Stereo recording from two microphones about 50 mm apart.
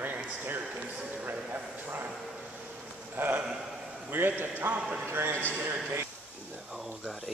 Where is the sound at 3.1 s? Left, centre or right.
Right.